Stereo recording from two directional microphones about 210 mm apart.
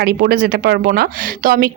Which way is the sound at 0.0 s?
45° right (ahead or behind).